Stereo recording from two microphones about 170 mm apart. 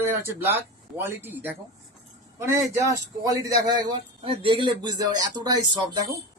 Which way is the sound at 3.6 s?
25° right (ahead or behind).